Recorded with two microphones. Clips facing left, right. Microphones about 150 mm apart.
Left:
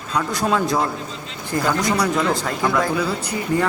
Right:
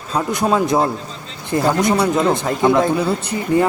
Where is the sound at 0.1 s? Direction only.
25° right (ahead or behind).